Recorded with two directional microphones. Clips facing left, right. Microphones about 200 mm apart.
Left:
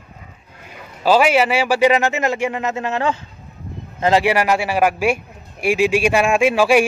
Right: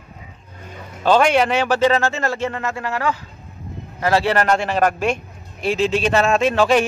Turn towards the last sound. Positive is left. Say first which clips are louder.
# left 2 dB
turn(degrees=10)  # may be behind; listen again after turning